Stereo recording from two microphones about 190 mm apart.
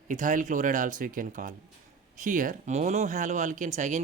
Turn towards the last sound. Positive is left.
turn(degrees=-40)  # may be behind; listen again after turning